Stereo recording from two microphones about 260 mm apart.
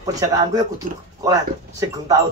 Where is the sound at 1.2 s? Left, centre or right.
Centre.